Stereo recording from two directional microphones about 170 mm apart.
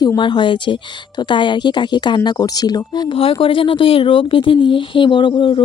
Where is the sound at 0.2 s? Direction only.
30° left (ahead or behind).